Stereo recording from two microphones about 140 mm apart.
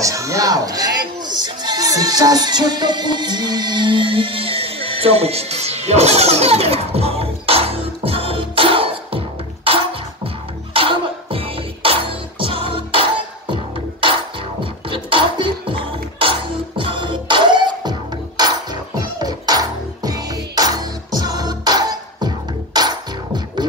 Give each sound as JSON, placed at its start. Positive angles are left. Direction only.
{"t": 0.0, "sound": "music", "side_deg": -25}